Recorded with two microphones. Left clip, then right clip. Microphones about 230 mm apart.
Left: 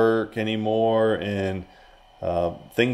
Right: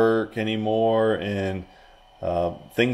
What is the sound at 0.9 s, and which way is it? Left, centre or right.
Speech, left.